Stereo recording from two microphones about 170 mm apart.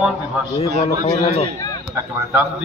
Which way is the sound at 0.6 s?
40° left (ahead or behind).